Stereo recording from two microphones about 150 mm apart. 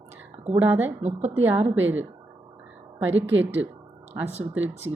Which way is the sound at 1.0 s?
50° right (ahead or behind).